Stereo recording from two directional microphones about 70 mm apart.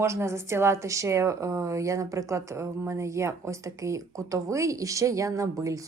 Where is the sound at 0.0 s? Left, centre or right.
Right.